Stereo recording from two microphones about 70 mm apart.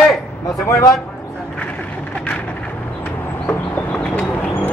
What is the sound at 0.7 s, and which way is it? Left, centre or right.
Speech, left.